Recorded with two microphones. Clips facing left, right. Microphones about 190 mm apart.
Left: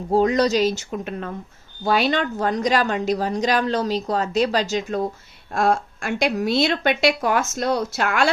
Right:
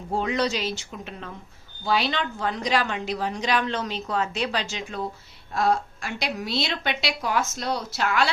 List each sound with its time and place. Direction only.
0.1 s a woman's voice: 40° left (ahead or behind)